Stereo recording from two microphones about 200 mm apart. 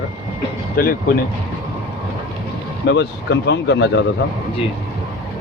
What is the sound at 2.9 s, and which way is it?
Speech, 60° left (ahead or behind).